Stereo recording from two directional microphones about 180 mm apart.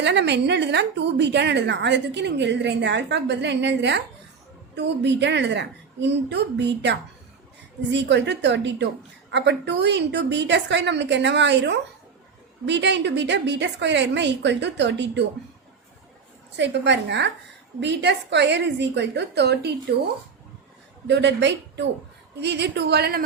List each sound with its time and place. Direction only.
0.0 s a woman's voice: 70° right (ahead or behind)
16.6 s a woman's voice: 75° right (ahead or behind)
21.1 s a woman's voice: 75° right (ahead or behind)